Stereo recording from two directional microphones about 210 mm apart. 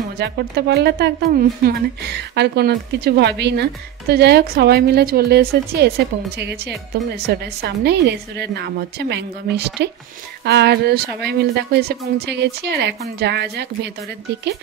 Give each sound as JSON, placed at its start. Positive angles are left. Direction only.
{"t": 0.2, "sound": "a woman's voice", "side_deg": -50}